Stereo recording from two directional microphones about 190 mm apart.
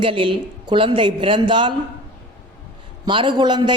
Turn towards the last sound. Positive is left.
turn(degrees=-25)  # may be behind; listen again after turning